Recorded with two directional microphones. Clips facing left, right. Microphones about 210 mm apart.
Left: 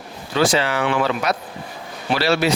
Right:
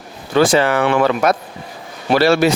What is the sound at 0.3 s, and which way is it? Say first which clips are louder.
Speech: right 5 dB; 50° right (ahead or behind).